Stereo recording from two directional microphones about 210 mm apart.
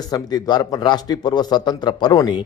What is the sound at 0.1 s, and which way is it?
A man's voice, 20° left (ahead or behind).